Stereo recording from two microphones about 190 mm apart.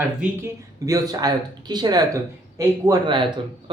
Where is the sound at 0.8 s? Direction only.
20° right (ahead or behind).